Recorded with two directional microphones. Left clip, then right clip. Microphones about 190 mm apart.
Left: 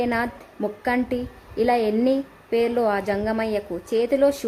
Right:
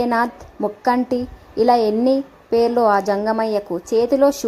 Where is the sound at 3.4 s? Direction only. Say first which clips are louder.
Right 5 dB; 15° right (ahead or behind).